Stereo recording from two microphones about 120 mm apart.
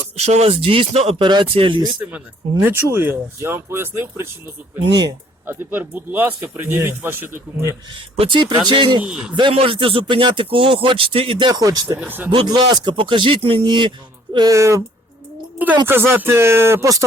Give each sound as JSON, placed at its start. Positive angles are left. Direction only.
{"t": 0.2, "sound": "speech", "side_deg": -65}
{"t": 0.9, "sound": "speech", "side_deg": -60}
{"t": 1.2, "sound": "speech", "side_deg": -40}
{"t": 2.0, "sound": "speech", "side_deg": -15}
{"t": 5.5, "sound": "speech", "side_deg": -15}
{"t": 8.2, "sound": "speech", "side_deg": -45}
{"t": 9.0, "sound": "a man's voice", "side_deg": -5}
{"t": 9.3, "sound": "speech", "side_deg": -45}
{"t": 11.9, "sound": "speech", "side_deg": -15}
{"t": 12.5, "sound": "speech", "side_deg": -35}
{"t": 14.3, "sound": "speech", "side_deg": -30}
{"t": 15.9, "sound": "speech", "side_deg": -20}